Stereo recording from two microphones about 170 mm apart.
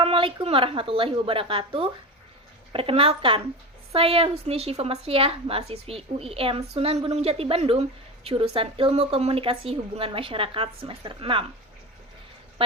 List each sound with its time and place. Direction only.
0.0 s a woman's voice: 30° right (ahead or behind)